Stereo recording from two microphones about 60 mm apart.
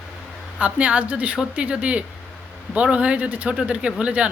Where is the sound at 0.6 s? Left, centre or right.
Right.